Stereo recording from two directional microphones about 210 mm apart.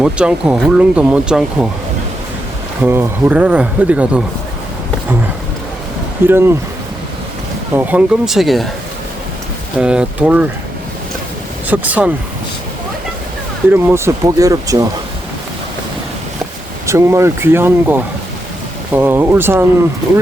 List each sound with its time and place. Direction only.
0.0 s speech: 5° right (ahead or behind)
2.8 s speech: 10° right (ahead or behind)
6.2 s speech: 10° right (ahead or behind)
7.8 s speech: 5° right (ahead or behind)
9.7 s speech: 5° right (ahead or behind)
11.7 s speech: 5° right (ahead or behind)
13.7 s speech: 10° right (ahead or behind)
16.8 s speech: 15° right (ahead or behind)